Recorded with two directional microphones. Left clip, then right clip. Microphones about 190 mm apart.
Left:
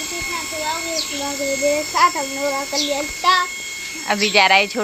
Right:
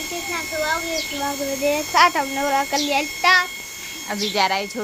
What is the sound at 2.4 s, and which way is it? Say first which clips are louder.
Speech: right 2 dB; 25° right (ahead or behind).